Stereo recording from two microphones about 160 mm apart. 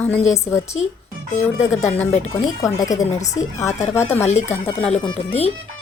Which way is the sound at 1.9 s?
10° left (ahead or behind).